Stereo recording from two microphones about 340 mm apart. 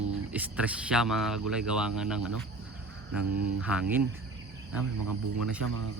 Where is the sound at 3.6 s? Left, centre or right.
Centre.